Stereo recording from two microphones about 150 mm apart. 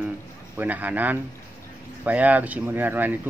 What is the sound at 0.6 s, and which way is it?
Speech, 10° right (ahead or behind).